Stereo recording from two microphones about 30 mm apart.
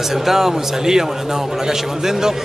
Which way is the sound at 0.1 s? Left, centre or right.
Centre.